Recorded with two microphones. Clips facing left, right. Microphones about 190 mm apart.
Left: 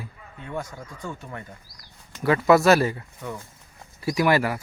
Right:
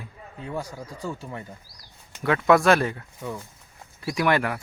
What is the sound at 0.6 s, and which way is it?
Speech, 35° right (ahead or behind).